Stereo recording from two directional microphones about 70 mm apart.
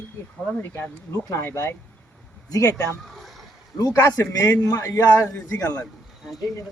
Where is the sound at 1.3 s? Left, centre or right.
Left.